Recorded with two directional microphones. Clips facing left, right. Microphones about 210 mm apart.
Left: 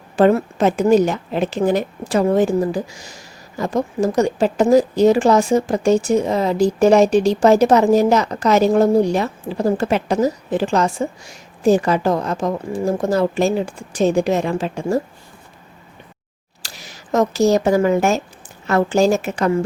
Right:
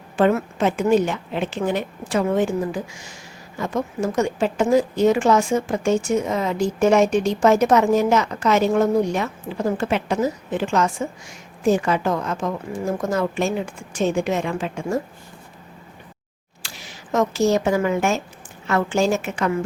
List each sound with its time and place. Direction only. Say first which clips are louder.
0.2 s a woman's voice: left 4 dB; 35° left (ahead or behind)
16.6 s a woman's voice: left 1 dB; 40° left (ahead or behind)